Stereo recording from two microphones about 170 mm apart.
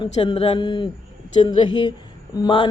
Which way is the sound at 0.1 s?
35° left (ahead or behind).